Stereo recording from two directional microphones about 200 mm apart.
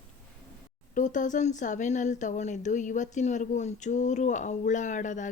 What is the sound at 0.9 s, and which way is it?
Speech, 40° left (ahead or behind).